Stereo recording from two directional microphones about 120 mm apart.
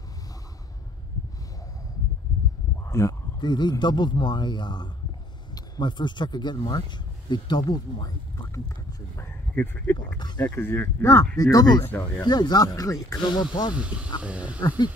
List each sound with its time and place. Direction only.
2.8 s a sound: 25° left (ahead or behind)
3.3 s speech: 40° left (ahead or behind)
10.1 s speech: 35° left (ahead or behind)
10.4 s speech: 20° left (ahead or behind); by 11.8 s 35° left (ahead or behind)
11.8 s speech: 15° left (ahead or behind)
12.2 s speech: 35° left (ahead or behind)
13.7 s speech: 10° right (ahead or behind)
14.6 s speech: 30° left (ahead or behind)